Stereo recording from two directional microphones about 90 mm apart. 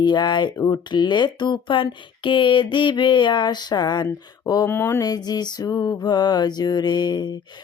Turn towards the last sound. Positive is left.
turn(degrees=55)  # may be behind; listen again after turning